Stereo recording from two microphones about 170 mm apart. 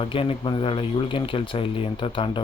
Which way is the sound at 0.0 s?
35° left (ahead or behind).